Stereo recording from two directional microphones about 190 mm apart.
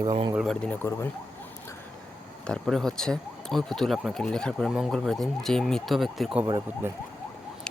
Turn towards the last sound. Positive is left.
turn(degrees=-15)  # may be behind; listen again after turning